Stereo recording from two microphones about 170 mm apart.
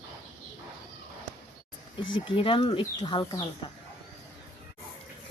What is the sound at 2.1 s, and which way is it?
Speech, 30° left (ahead or behind).